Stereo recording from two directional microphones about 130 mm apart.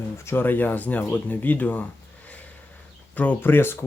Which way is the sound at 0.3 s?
15° left (ahead or behind).